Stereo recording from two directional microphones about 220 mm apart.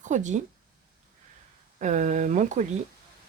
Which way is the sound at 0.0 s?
35° right (ahead or behind).